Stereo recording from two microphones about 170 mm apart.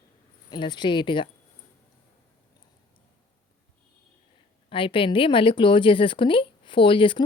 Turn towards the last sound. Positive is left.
turn(degrees=30)  # may be behind; listen again after turning